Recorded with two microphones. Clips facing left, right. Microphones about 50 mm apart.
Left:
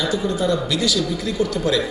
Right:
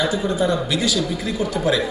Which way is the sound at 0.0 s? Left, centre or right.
Right.